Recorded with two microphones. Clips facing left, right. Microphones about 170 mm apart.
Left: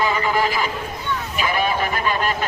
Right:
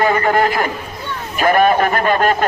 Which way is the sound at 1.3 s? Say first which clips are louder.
Right 10 dB; 50° right (ahead or behind).